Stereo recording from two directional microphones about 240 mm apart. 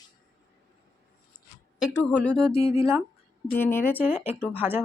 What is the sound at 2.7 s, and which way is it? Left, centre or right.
Speech, centre.